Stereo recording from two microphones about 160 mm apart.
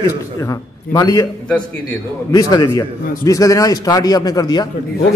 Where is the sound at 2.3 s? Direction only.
25° left (ahead or behind).